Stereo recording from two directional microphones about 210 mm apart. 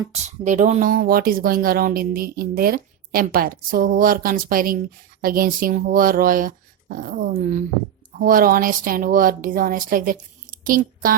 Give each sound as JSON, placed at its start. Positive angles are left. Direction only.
{"t": 0.1, "sound": "speech", "side_deg": -35}